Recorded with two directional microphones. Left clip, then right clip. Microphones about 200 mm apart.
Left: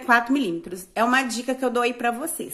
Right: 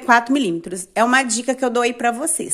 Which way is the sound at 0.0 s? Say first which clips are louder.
Right 4 dB; 35° right (ahead or behind).